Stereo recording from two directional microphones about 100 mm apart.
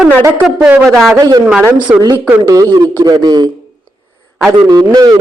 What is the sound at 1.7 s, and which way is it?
Speech, 15° right (ahead or behind).